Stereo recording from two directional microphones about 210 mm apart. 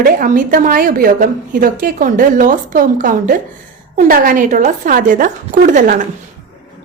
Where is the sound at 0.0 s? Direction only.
40° right (ahead or behind).